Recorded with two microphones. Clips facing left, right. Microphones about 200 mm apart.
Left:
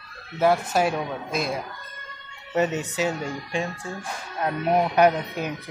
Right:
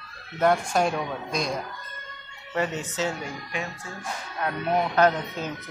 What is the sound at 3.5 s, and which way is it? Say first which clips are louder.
Speech: left 6 dB; 30° left (ahead or behind).